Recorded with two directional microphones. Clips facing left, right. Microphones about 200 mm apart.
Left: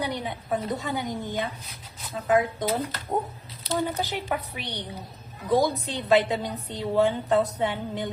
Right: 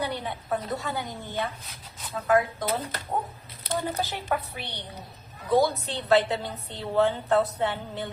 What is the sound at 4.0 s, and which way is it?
A woman's voice, 15° left (ahead or behind).